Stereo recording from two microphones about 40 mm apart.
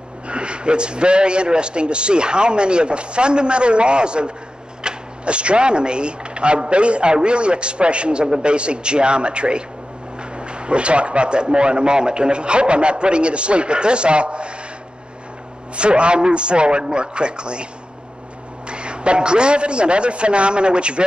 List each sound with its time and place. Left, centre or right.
0.3 s speech: right
15.7 s speech: right
18.7 s speech: right